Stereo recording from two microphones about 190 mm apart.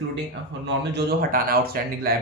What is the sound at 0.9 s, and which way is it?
Speech, 50° right (ahead or behind).